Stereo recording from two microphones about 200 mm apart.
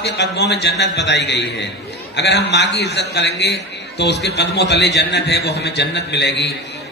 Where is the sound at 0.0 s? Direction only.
60° left (ahead or behind).